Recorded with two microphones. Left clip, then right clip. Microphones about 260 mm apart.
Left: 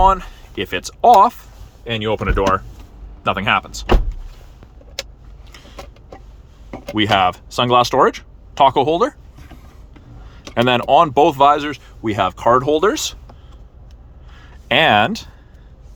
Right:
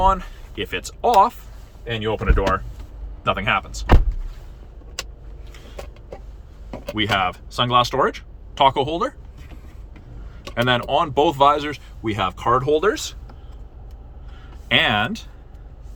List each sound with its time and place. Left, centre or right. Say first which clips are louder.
0.0 s speech: left 5 dB; left
6.9 s speech: left 6 dB; left
10.5 s speech: left 6 dB; left
14.3 s a sound: left 3 dB; centre